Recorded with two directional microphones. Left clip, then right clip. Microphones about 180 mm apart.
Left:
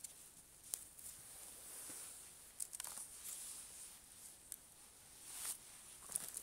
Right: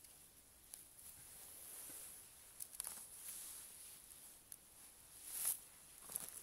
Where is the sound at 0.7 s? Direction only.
65° left (ahead or behind).